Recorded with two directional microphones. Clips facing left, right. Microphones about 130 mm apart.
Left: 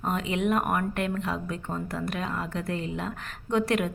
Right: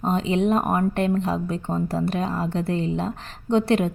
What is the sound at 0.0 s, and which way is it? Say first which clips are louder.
A woman's voice: right 6 dB; 30° right (ahead or behind).